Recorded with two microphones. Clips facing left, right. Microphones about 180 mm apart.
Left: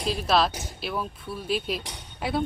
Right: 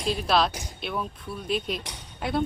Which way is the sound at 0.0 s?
Centre (ahead or behind).